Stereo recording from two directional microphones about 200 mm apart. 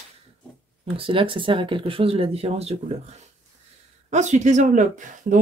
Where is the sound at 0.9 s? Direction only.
25° right (ahead or behind).